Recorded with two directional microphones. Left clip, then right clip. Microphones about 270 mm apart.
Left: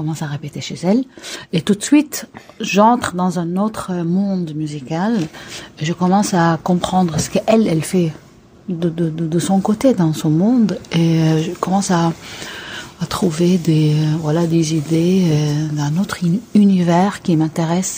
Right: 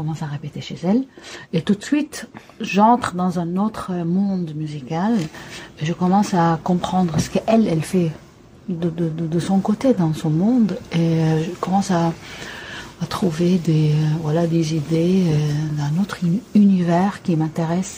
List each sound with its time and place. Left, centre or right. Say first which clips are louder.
0.1 s speech: left 4 dB; left